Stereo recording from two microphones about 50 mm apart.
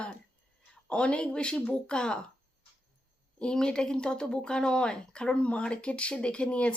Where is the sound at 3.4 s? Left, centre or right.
Centre.